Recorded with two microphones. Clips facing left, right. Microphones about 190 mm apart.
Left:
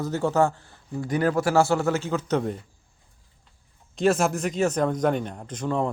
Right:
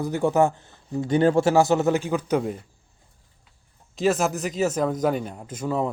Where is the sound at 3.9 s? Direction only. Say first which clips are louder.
Even; centre (ahead or behind).